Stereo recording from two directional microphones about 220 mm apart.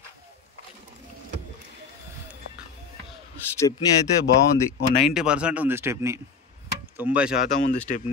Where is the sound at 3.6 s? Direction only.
15° left (ahead or behind).